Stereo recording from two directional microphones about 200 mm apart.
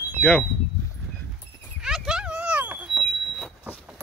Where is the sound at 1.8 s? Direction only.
Centre (ahead or behind).